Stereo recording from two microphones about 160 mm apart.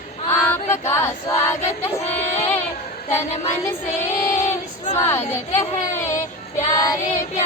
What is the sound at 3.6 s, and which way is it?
Child singing, 15° left (ahead or behind).